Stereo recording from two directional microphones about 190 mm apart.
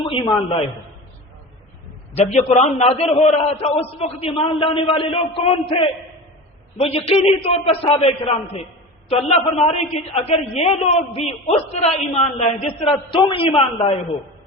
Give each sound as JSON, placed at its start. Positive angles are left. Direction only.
{"t": 0.0, "sound": "a woman's voice", "side_deg": 25}
{"t": 2.1, "sound": "a man's voice", "side_deg": 35}